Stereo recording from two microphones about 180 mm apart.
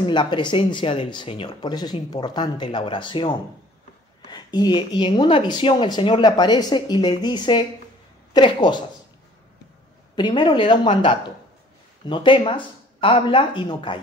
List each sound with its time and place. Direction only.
0.0 s speech: 25° left (ahead or behind)
10.1 s speech: 25° left (ahead or behind)
12.1 s speech: 30° left (ahead or behind)